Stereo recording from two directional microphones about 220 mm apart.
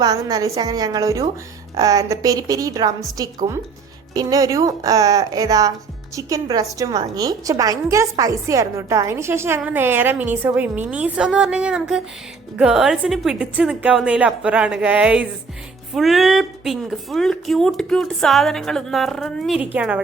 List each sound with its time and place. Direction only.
0.0 s speech: 15° right (ahead or behind)